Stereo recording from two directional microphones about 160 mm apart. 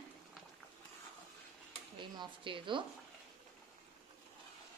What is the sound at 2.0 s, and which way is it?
Speech, 30° right (ahead or behind).